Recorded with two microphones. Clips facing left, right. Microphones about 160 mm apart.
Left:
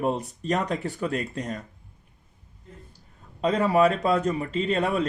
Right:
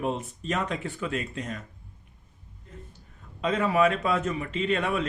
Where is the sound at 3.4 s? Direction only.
35° left (ahead or behind).